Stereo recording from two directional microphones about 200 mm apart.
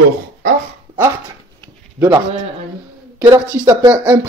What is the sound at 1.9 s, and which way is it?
Speech, 15° right (ahead or behind).